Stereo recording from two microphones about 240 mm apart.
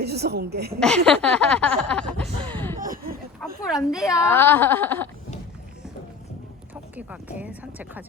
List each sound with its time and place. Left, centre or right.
0.0 s a woman's voice: right
0.8 s speech: centre
2.8 s a sound: right
4.0 s a woman's voice: centre
6.9 s speech: centre